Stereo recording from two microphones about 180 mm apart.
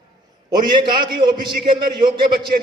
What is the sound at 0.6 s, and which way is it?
A man's voice, 25° right (ahead or behind).